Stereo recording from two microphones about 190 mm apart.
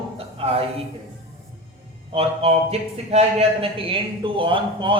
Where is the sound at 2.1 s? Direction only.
30° right (ahead or behind).